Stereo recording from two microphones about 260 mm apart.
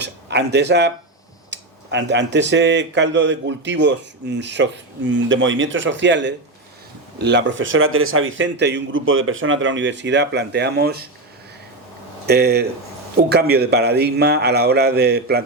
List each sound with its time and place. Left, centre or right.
0.0 s speech: right
12.2 s speech: right